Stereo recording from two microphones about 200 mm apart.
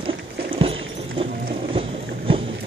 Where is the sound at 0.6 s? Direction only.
25° right (ahead or behind).